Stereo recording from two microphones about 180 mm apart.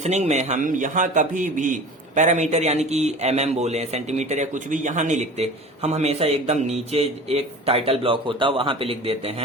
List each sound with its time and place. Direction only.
0.0 s a man's voice: 40° right (ahead or behind)